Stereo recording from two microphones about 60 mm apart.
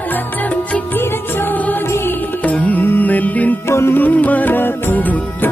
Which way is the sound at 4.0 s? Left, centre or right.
Left.